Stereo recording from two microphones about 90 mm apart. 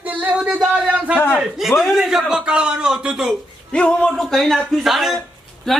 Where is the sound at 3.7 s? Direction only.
10° left (ahead or behind).